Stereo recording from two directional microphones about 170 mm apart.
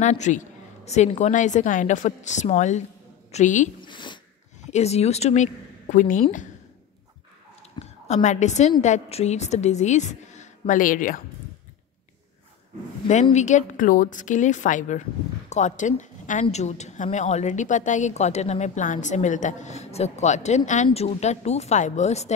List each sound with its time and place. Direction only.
0.0 s a woman's voice: 45° left (ahead or behind)
3.8 s zipper: 30° left (ahead or behind)
4.6 s speech: 40° left (ahead or behind)
7.8 s a woman's voice: 45° left (ahead or behind)
13.1 s a woman's voice: 45° left (ahead or behind)